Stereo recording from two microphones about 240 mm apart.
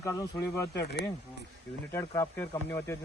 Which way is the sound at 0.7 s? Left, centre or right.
Left.